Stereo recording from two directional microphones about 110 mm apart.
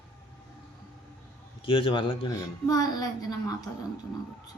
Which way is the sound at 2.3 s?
35° left (ahead or behind).